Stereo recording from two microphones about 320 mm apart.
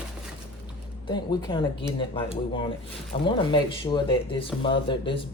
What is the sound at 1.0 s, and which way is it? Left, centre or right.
Speech, centre.